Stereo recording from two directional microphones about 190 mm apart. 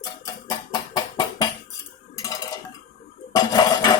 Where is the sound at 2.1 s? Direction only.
20° left (ahead or behind).